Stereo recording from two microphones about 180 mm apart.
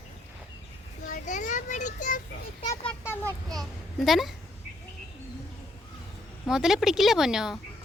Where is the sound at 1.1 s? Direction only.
45° left (ahead or behind).